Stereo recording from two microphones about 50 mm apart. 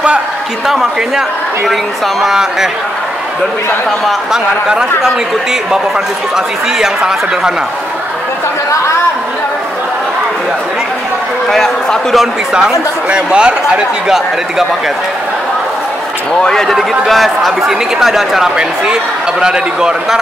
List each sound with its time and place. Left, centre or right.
0.7 s a man's voice: centre
2.2 s a man's voice: centre
4.3 s a man's voice: centre
11.4 s a man's voice: centre
12.5 s speech: centre
16.3 s a man's voice: centre
17.1 s a man's voice: centre